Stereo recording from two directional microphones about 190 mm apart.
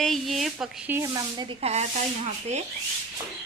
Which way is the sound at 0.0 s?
Centre (ahead or behind).